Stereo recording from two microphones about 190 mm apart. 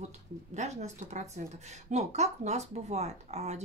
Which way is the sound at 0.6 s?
35° right (ahead or behind).